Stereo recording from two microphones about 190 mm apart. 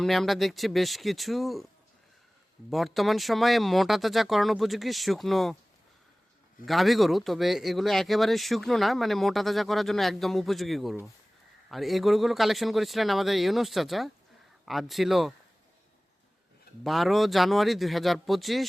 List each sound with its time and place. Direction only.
0.0 s speech: centre (ahead or behind)
2.6 s speech: centre (ahead or behind)
6.7 s speech: centre (ahead or behind)
16.8 s speech: centre (ahead or behind)